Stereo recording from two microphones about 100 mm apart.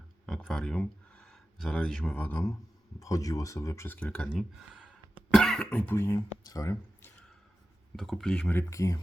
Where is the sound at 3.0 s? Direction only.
35° left (ahead or behind).